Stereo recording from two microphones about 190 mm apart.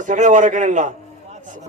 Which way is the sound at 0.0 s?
40° right (ahead or behind).